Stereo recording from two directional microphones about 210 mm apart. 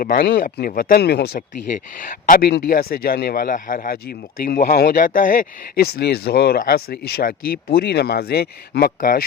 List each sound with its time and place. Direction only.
0.0 s speech: 45° left (ahead or behind)
2.2 s speech: 40° left (ahead or behind)